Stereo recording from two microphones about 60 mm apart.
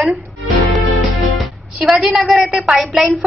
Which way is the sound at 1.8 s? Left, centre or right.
Centre.